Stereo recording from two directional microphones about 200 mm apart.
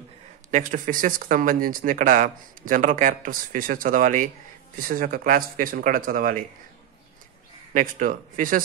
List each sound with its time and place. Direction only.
0.5 s speech: 40° right (ahead or behind)
7.7 s speech: 40° right (ahead or behind)